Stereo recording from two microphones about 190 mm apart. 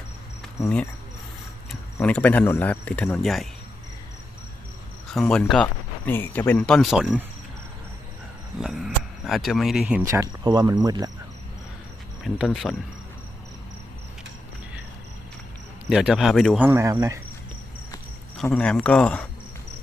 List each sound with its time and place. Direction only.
0.6 s a man's voice: 5° left (ahead or behind)
2.0 s a man's voice: 5° left (ahead or behind)
5.1 s speech: 5° left (ahead or behind)
8.5 s speech: centre (ahead or behind)
10.0 s speech: 15° right (ahead or behind)
12.5 s speech: centre (ahead or behind)
15.9 s speech: centre (ahead or behind)
16.6 s speech: 15° right (ahead or behind)
18.4 s a man's voice: 5° left (ahead or behind)